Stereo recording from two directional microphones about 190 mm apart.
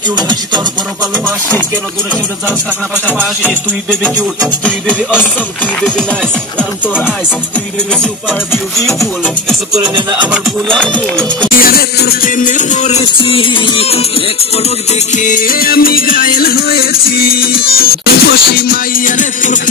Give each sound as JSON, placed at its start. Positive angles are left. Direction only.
{"t": 4.0, "sound": "music", "side_deg": 5}
{"t": 8.0, "sound": "music", "side_deg": 5}
{"t": 10.3, "sound": "music", "side_deg": 5}
{"t": 11.5, "sound": "music", "side_deg": 50}
{"t": 13.0, "sound": "music", "side_deg": 25}
{"t": 15.1, "sound": "music", "side_deg": 45}